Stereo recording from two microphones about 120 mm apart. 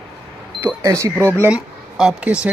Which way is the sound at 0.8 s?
25° right (ahead or behind).